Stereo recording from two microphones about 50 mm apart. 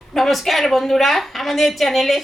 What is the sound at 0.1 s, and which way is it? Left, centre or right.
A woman's voice, centre.